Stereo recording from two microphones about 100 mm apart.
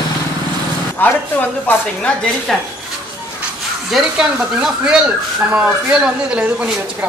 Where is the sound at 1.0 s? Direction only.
20° left (ahead or behind).